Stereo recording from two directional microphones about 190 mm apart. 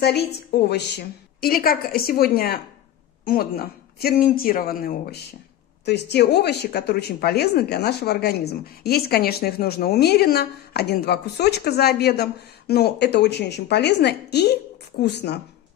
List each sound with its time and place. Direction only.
0.0 s a woman's voice: 60° left (ahead or behind)
5.9 s speech: 60° left (ahead or behind)